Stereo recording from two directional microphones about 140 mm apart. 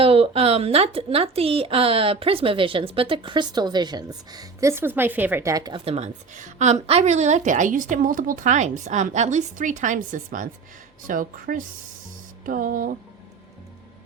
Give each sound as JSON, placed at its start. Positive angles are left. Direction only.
{"t": 0.0, "sound": "a woman's voice", "side_deg": -45}
{"t": 5.8, "sound": "a woman's voice", "side_deg": -50}